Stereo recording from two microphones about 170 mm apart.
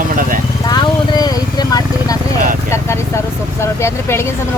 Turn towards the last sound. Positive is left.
turn(degrees=15)  # may be behind; listen again after turning